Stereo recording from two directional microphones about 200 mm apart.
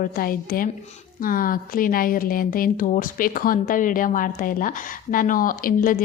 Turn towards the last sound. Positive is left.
turn(degrees=45)  # may be behind; listen again after turning